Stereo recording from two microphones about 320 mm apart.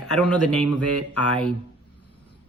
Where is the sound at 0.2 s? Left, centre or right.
Centre.